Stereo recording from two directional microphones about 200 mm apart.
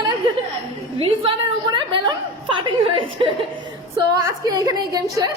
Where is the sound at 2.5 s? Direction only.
25° right (ahead or behind).